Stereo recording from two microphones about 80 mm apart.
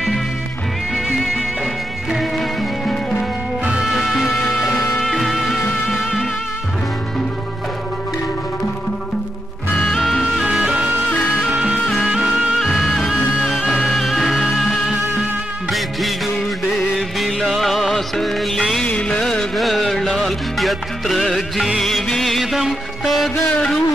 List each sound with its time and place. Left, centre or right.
0.9 s music: centre
9.8 s music: centre
10.4 s music: centre
11.1 s music: centre
11.5 s music: centre
11.8 s music: centre
12.2 s music: centre
12.5 s music: centre
15.7 s music: centre
18.9 s music: centre
23.5 s music: centre